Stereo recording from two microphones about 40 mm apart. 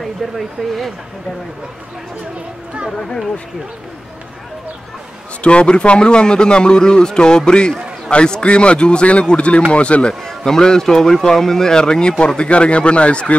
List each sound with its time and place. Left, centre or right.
0.0 s speech: centre
5.4 s a man's voice: left
10.2 s speech: centre; by 13.4 s left